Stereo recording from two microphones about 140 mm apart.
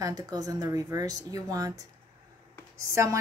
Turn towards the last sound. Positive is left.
turn(degrees=-20)  # may be behind; listen again after turning